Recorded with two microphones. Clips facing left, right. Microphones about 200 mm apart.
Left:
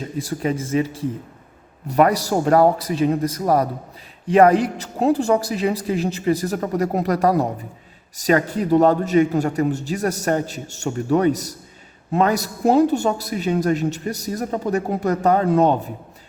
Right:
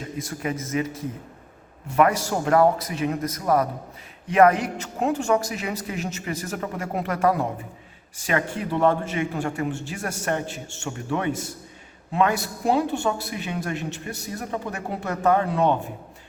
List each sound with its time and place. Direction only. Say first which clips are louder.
0.2 s a woman's voice: left 6 dB; 30° left (ahead or behind)